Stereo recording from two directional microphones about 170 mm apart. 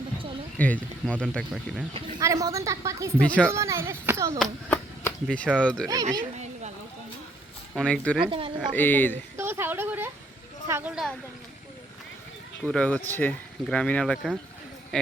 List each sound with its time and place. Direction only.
0.6 s speech: 10° left (ahead or behind)
1.9 s speech: 20° right (ahead or behind)
3.2 s speech: 5° left (ahead or behind)
3.5 s speech: 15° right (ahead or behind)
4.4 s speech: 5° left (ahead or behind)
5.9 s speech: 20° right (ahead or behind)
7.8 s speech: 5° left (ahead or behind)
8.2 s speech: 30° right (ahead or behind)
8.7 s speech: 10° left (ahead or behind)
9.4 s speech: 15° right (ahead or behind)
12.6 s speech: 10° left (ahead or behind)